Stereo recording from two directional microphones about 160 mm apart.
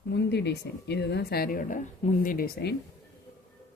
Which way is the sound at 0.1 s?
90° left.